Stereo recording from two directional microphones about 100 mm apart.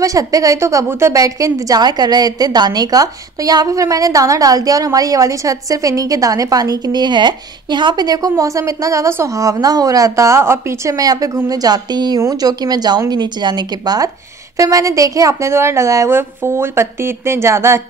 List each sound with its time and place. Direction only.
0.0 s a woman's voice: 35° right (ahead or behind)
11.0 s a woman's voice: 35° right (ahead or behind)